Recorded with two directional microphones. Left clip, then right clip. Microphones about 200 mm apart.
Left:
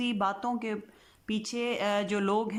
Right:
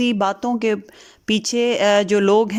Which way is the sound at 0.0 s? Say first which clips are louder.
Right 10 dB; 35° right (ahead or behind).